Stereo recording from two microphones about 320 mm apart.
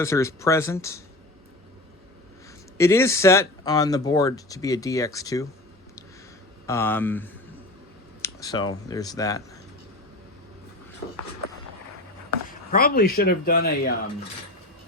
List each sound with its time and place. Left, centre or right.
0.0 s speech: centre
2.7 s speech: centre
6.7 s speech: centre
12.5 s speech: left